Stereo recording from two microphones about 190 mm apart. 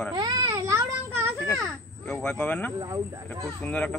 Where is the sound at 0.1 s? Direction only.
20° right (ahead or behind).